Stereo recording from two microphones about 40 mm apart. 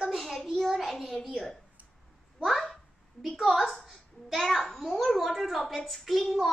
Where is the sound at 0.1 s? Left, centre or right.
Centre.